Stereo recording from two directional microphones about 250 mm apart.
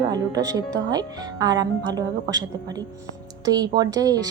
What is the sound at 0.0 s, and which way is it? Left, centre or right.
Speech, centre.